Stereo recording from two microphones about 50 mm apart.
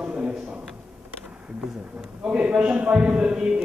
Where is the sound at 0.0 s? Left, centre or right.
Right.